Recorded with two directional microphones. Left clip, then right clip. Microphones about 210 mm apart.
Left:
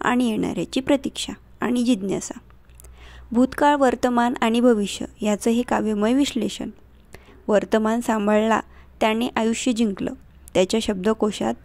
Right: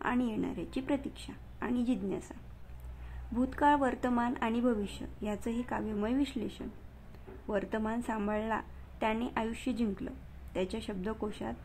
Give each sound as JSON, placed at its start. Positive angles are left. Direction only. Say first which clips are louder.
{"t": 0.0, "sound": "a woman's voice", "louder": "left 12 dB", "side_deg": 35}
{"t": 3.3, "sound": "a woman's voice", "louder": "left 10 dB", "side_deg": 35}